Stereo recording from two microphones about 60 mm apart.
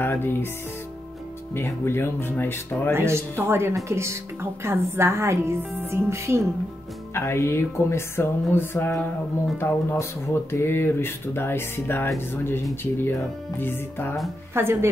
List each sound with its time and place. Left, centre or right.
0.0 s speech: left
1.5 s speech: left
2.9 s a woman's voice: right
3.7 s a woman's voice: right
7.2 s music: left
9.6 s speech: left
14.5 s a woman's voice: right